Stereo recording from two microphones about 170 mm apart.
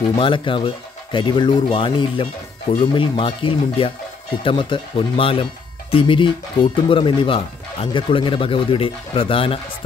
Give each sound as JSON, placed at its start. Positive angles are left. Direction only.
{"t": 0.1, "sound": "speech", "side_deg": 30}